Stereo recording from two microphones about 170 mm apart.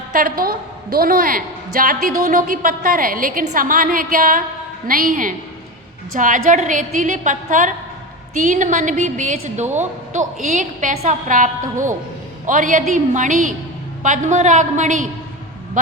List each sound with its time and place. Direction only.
0.1 s a woman's voice: 55° right (ahead or behind)